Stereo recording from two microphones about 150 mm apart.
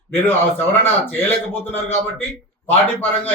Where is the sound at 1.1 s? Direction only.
15° left (ahead or behind).